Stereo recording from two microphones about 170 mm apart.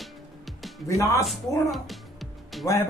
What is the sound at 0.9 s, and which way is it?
Speech, 20° left (ahead or behind).